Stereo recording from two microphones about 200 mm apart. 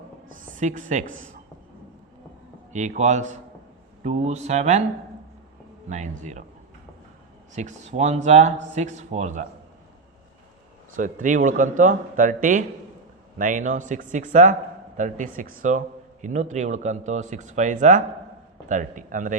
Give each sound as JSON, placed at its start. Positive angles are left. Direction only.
{"t": 0.3, "sound": "a woman's voice", "side_deg": -40}
{"t": 2.7, "sound": "speech", "side_deg": -35}
{"t": 5.9, "sound": "speech", "side_deg": -35}
{"t": 7.5, "sound": "speech", "side_deg": -35}
{"t": 10.9, "sound": "speech", "side_deg": -40}